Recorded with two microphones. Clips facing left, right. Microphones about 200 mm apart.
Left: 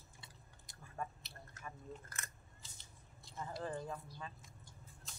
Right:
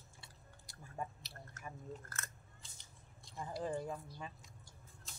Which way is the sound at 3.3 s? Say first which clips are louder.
Right 3 dB; 15° right (ahead or behind).